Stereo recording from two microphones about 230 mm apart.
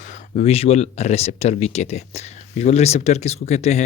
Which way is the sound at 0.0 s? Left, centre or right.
Left.